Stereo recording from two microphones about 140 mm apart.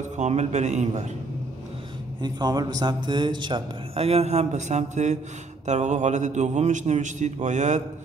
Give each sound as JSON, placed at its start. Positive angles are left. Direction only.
{"t": 0.2, "sound": "a man's voice", "side_deg": -55}
{"t": 2.2, "sound": "a man's voice", "side_deg": -30}